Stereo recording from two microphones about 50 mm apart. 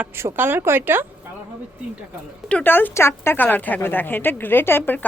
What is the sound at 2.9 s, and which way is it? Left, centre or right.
Speech, left.